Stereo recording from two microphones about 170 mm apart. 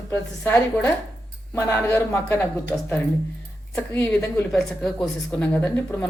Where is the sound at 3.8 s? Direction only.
10° left (ahead or behind).